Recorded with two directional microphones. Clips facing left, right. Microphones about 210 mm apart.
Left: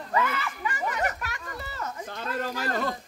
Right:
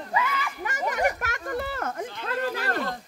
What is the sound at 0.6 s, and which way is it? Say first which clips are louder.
A child's voice: right 4 dB; 45° right (ahead or behind).